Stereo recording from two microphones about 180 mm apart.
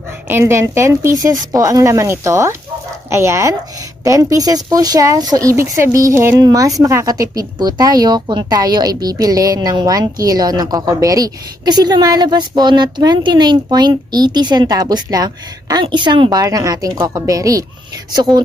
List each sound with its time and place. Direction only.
0.3 s speech: 15° right (ahead or behind)